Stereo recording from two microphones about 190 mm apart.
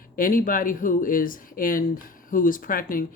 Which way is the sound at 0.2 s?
45° left (ahead or behind).